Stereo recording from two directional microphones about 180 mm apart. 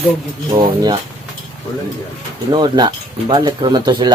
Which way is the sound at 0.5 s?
25° right (ahead or behind).